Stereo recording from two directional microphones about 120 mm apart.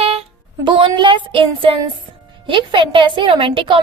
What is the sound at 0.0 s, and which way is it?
Child singing, 55° right (ahead or behind).